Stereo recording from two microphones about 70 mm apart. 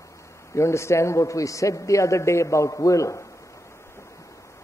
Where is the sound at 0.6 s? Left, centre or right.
Left.